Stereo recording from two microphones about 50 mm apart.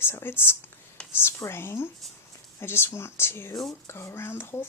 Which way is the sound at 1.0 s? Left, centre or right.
Left.